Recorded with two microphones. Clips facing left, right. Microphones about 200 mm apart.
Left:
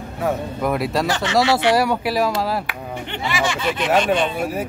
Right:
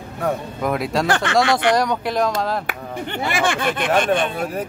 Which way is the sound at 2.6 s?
50° right (ahead or behind).